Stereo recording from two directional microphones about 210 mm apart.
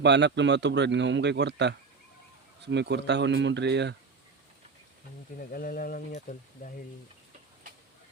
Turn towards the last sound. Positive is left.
turn(degrees=40)  # may be behind; listen again after turning